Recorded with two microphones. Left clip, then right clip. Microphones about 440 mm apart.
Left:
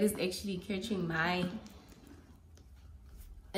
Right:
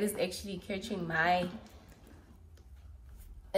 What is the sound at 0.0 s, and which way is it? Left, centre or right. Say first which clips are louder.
A woman's voice: even; centre.